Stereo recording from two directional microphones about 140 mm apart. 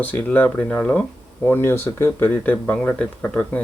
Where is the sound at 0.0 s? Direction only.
10° left (ahead or behind).